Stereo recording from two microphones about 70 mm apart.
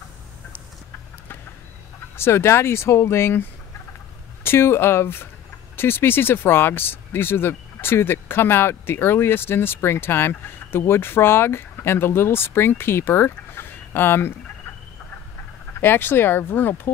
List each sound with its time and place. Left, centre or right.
2.1 s speech: left
15.8 s speech: left